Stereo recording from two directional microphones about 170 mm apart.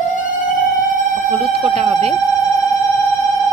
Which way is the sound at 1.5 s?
35° right (ahead or behind).